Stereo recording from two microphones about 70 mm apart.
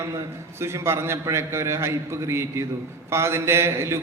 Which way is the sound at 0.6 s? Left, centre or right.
Right.